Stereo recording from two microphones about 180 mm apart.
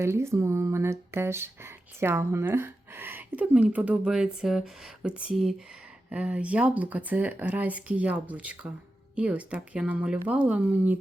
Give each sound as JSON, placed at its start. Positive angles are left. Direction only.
{"t": 0.0, "sound": "speech", "side_deg": -15}